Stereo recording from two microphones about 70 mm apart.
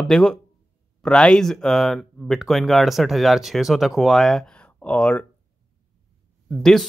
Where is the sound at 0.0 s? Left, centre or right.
Centre.